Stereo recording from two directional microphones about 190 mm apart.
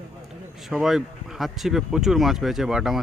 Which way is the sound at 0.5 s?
Centre (ahead or behind).